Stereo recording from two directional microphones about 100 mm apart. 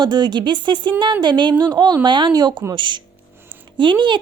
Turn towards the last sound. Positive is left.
turn(degrees=-55)  # may be behind; listen again after turning